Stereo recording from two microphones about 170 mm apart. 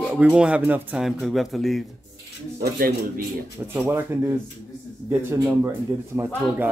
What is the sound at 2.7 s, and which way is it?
Speech, 60° right (ahead or behind).